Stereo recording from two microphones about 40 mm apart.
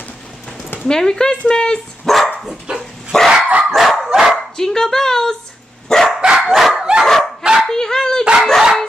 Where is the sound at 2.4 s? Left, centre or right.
Centre.